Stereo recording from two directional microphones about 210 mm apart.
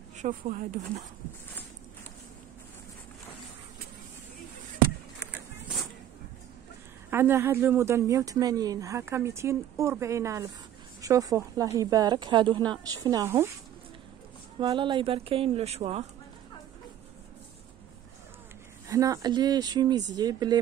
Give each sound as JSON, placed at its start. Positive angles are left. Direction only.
{"t": 0.2, "sound": "speech", "side_deg": -35}
{"t": 5.2, "sound": "a sound", "side_deg": -5}
{"t": 7.1, "sound": "speech", "side_deg": -10}
{"t": 14.6, "sound": "speech", "side_deg": -20}
{"t": 18.9, "sound": "speech", "side_deg": -15}